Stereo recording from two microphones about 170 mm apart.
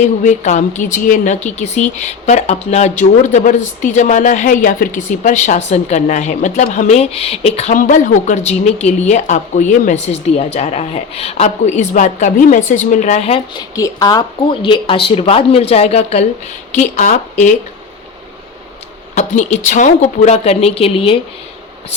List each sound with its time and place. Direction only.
0.3 s a woman's voice: 45° left (ahead or behind)
19.1 s a woman's voice: 45° left (ahead or behind)